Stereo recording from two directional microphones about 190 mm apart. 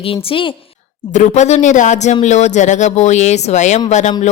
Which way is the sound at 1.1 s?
40° left (ahead or behind).